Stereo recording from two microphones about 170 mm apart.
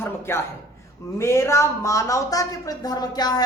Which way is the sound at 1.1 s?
15° left (ahead or behind).